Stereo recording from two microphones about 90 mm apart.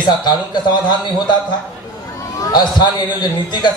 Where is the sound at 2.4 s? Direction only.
50° left (ahead or behind).